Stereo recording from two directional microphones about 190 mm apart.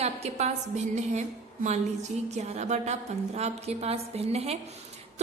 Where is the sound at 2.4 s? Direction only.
35° right (ahead or behind).